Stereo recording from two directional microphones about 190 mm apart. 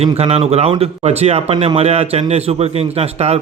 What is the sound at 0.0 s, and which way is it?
Speech, 30° right (ahead or behind).